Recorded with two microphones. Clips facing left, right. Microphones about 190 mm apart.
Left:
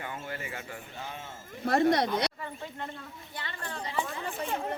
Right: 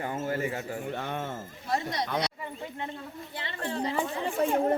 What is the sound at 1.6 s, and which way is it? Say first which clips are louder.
Speech: left 7 dB; 60° left (ahead or behind).